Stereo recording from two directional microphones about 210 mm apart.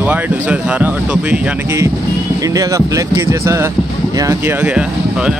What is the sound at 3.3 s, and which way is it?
Speech, 15° right (ahead or behind).